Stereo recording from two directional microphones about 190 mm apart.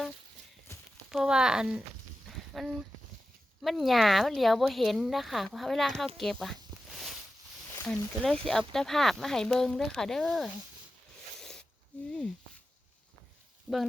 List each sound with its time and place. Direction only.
0.7 s a sound: 15° left (ahead or behind)
1.1 s speech: 5° right (ahead or behind)
6.7 s a sound: 25° right (ahead or behind)
7.9 s speech: 5° left (ahead or behind)
11.3 s snake: centre (ahead or behind)
13.7 s speech: 5° right (ahead or behind)